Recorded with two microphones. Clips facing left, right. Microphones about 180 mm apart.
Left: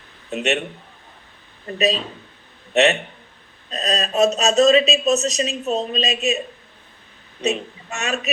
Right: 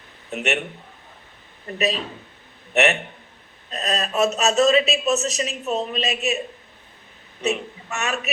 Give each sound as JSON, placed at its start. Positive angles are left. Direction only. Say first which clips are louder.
{"t": 0.3, "sound": "speech", "louder": "left 3 dB", "side_deg": 20}
{"t": 1.6, "sound": "speech", "louder": "left 3 dB", "side_deg": 15}
{"t": 3.7, "sound": "speech", "louder": "left 2 dB", "side_deg": 20}
{"t": 7.4, "sound": "speech", "louder": "left 1 dB", "side_deg": 20}